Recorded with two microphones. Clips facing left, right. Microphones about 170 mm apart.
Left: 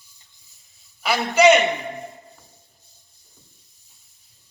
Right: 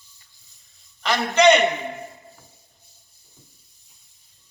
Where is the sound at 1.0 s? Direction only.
5° left (ahead or behind).